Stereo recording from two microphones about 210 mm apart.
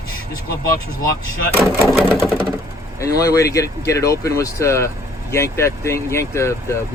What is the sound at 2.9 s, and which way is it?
Speech, 15° left (ahead or behind).